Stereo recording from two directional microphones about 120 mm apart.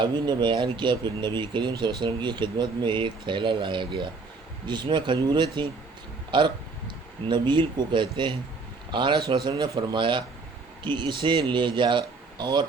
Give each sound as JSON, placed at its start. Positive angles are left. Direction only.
{"t": 0.0, "sound": "speech", "side_deg": -40}